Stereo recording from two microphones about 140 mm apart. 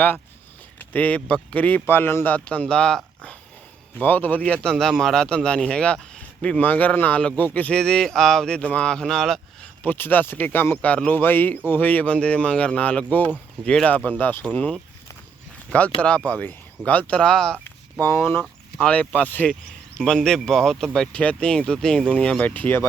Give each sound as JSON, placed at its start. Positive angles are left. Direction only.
{"t": 0.9, "sound": "speech", "side_deg": 10}
{"t": 9.8, "sound": "speech", "side_deg": 15}
{"t": 16.0, "sound": "speech", "side_deg": 10}
{"t": 18.0, "sound": "speech", "side_deg": 20}